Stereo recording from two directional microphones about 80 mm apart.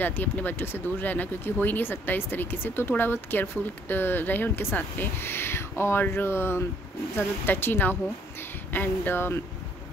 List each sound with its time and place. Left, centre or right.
0.0 s speech: left